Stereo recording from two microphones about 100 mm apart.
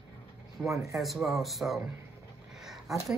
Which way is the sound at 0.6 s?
5° right (ahead or behind).